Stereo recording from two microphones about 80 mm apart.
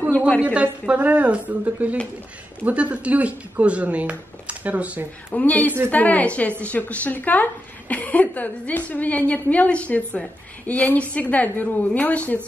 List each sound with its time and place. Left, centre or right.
0.4 s a woman's voice: centre
5.3 s a woman's voice: centre